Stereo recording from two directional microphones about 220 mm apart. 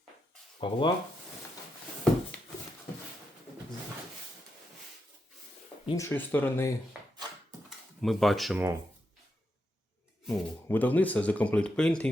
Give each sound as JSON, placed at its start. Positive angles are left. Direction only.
{"t": 0.6, "sound": "speech", "side_deg": 20}
{"t": 5.8, "sound": "speech", "side_deg": 20}
{"t": 6.1, "sound": "speech", "side_deg": 10}
{"t": 8.0, "sound": "speech", "side_deg": 0}
{"t": 10.2, "sound": "speech", "side_deg": 5}